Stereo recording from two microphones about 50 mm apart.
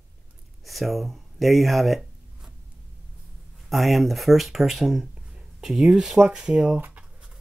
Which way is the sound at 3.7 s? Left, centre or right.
Centre.